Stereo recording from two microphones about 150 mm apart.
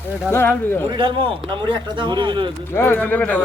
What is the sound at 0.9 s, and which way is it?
Speech, 35° right (ahead or behind).